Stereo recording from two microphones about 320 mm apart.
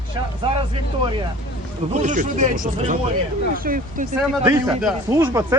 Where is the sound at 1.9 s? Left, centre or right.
Right.